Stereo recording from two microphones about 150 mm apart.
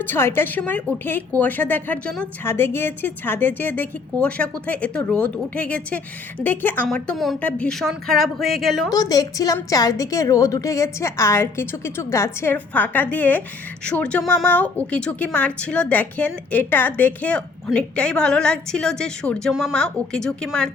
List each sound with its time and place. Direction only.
0.0 s a woman's voice: 15° left (ahead or behind)
8.9 s a woman's voice: 25° left (ahead or behind); by 20.7 s 5° left (ahead or behind)